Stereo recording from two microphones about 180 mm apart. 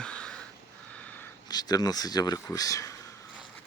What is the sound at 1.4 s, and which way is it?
Speech, 20° left (ahead or behind).